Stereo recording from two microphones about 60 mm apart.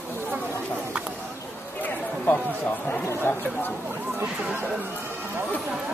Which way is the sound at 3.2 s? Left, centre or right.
Left.